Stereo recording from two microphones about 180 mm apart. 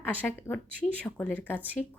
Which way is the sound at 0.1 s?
10° left (ahead or behind).